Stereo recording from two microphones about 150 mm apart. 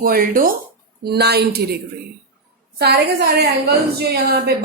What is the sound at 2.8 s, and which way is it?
Speech, 90° right.